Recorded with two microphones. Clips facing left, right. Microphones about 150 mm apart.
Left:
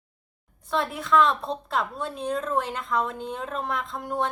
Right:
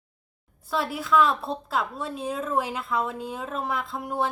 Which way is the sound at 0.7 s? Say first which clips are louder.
Left 1 dB; 5° right (ahead or behind).